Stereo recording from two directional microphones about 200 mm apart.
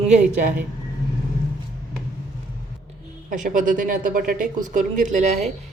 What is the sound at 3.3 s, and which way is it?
Speech, 40° right (ahead or behind).